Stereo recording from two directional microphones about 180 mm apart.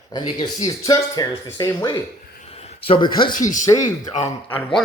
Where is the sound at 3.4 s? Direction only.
45° left (ahead or behind).